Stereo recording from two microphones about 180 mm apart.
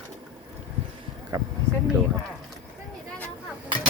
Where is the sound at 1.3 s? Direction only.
20° right (ahead or behind).